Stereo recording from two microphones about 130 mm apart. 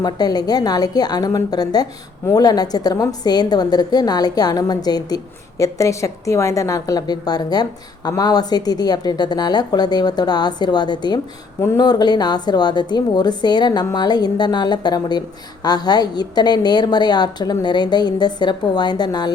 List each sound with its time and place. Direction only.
0.0 s a woman's voice: 30° left (ahead or behind)